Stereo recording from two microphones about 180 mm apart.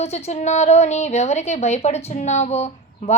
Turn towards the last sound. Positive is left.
turn(degrees=35)  # may be behind; listen again after turning